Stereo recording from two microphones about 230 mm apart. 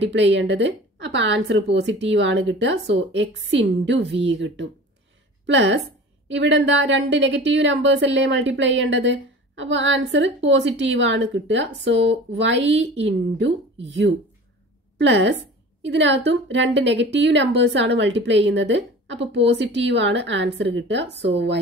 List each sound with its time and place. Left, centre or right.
0.1 s a woman's voice: right
15.0 s a woman's voice: right